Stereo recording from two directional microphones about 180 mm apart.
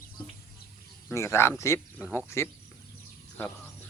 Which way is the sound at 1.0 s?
15° left (ahead or behind).